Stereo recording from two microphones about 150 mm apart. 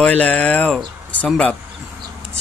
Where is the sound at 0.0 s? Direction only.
5° left (ahead or behind).